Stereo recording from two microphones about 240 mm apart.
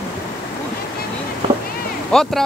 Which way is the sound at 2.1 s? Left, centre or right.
Centre.